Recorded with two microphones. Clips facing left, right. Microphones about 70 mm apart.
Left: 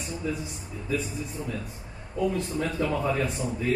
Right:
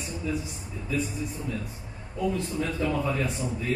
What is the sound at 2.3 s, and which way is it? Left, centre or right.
Speech, left.